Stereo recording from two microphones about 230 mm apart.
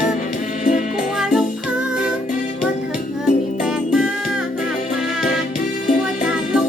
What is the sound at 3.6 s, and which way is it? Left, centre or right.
Music, centre.